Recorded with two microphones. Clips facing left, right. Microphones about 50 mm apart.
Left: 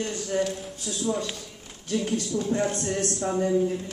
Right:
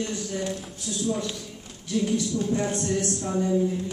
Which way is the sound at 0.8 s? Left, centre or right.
Centre.